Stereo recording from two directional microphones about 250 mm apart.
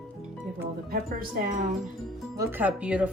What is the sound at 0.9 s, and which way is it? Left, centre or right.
Music, right.